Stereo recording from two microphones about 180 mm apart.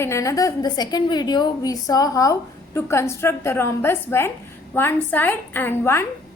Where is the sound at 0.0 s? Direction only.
15° left (ahead or behind).